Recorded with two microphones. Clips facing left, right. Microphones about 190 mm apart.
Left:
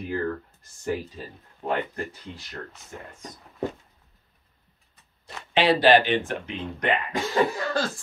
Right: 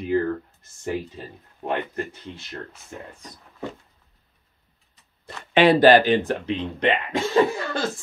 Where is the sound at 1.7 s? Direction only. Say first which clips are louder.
Right 1 dB; 25° right (ahead or behind).